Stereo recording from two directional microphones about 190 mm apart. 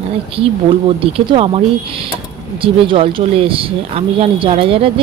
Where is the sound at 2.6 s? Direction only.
25° right (ahead or behind).